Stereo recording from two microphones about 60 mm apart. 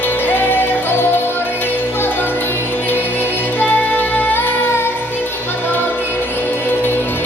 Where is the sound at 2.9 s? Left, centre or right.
Left.